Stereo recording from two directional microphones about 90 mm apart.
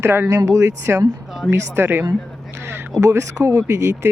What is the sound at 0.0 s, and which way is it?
Speech, 25° right (ahead or behind).